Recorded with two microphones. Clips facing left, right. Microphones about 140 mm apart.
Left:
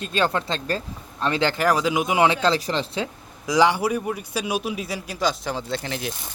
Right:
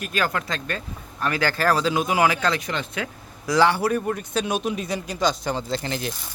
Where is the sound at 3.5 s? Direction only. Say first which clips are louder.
Even; 15° left (ahead or behind).